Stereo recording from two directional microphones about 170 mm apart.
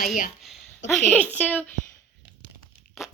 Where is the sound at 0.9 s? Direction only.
5° left (ahead or behind).